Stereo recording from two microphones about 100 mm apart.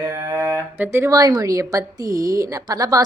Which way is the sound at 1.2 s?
35° right (ahead or behind).